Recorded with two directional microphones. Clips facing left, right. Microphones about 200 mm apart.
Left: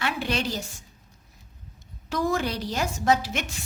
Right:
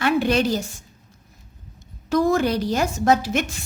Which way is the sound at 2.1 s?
45° right (ahead or behind).